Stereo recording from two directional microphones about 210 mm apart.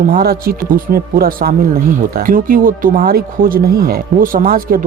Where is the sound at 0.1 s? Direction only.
50° right (ahead or behind).